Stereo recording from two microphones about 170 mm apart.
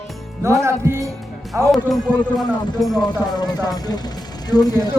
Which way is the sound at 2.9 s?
25° left (ahead or behind).